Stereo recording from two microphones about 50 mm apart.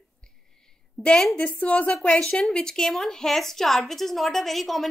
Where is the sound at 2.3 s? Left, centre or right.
Centre.